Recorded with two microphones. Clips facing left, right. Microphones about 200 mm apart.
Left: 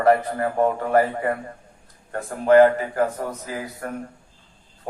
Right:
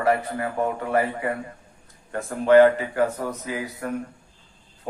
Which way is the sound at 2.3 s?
45° left (ahead or behind).